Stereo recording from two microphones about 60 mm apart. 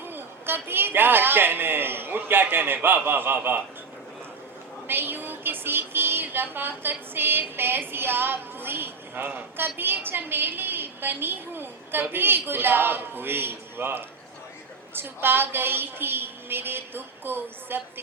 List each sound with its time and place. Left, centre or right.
0.0 s music: right
4.9 s music: right